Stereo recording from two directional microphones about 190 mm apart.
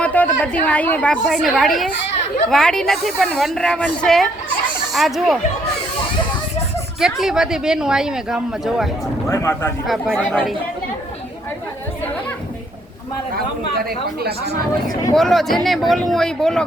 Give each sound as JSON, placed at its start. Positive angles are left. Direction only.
{"t": 0.0, "sound": "a woman's voice", "side_deg": 5}
{"t": 7.0, "sound": "speech", "side_deg": -5}
{"t": 9.3, "sound": "speech", "side_deg": 15}
{"t": 9.8, "sound": "speech", "side_deg": 0}
{"t": 14.2, "sound": "speech", "side_deg": -55}
{"t": 15.1, "sound": "speech", "side_deg": 0}